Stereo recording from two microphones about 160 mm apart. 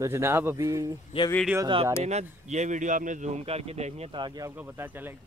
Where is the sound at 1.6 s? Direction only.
35° right (ahead or behind).